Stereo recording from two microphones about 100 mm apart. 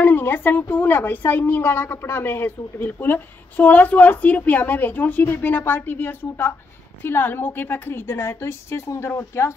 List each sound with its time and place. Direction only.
0.0 s a woman's voice: 20° left (ahead or behind)